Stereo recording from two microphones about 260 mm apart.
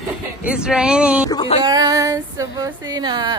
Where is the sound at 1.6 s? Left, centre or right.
Centre.